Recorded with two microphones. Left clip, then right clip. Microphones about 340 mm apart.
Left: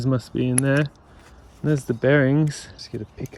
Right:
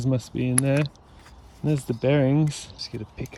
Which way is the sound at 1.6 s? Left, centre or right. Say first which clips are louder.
Left 4 dB; right.